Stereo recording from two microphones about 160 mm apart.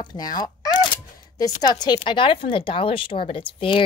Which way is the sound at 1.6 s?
25° left (ahead or behind).